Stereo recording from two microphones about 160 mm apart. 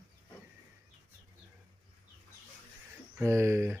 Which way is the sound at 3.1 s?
15° right (ahead or behind).